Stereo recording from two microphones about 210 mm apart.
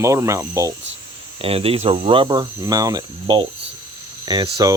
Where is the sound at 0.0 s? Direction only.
15° right (ahead or behind).